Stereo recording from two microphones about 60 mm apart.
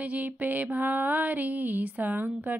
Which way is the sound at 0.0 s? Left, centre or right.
Right.